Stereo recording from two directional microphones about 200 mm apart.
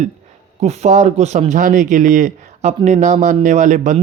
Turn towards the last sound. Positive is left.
turn(degrees=-40)  # may be behind; listen again after turning